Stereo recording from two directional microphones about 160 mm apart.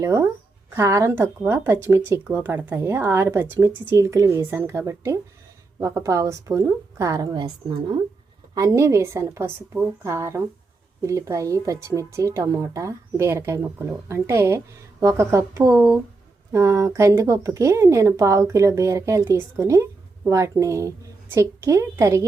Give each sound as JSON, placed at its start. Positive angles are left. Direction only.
{"t": 0.0, "sound": "a woman's voice", "side_deg": -20}